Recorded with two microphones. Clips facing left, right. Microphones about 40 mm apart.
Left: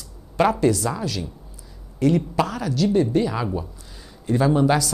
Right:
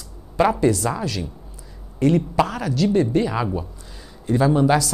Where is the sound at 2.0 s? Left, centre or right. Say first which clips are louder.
Right 2 dB; right.